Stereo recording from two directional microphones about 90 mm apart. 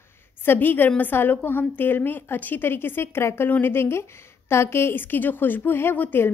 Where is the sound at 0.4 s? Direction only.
25° left (ahead or behind).